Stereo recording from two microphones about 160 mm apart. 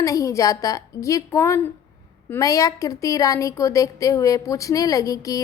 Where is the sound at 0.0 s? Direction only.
20° left (ahead or behind).